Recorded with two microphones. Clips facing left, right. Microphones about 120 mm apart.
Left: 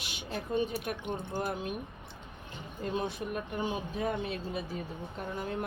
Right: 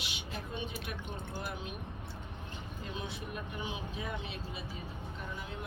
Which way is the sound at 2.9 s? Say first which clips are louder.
Left 8 dB; 45° left (ahead or behind).